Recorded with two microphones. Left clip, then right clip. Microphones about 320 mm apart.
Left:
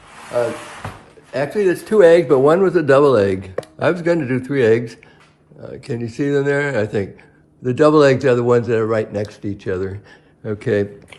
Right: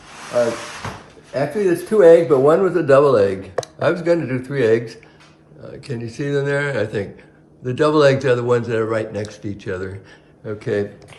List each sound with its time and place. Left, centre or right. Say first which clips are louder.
1.3 s a man's voice: left 1 dB; left